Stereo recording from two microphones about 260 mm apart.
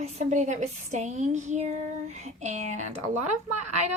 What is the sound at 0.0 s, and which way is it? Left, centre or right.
Speech, right.